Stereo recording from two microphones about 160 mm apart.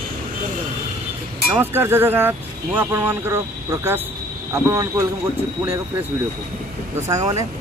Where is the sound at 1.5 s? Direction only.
15° right (ahead or behind).